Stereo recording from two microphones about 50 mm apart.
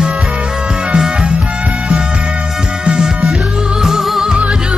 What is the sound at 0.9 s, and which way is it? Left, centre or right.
Music, centre.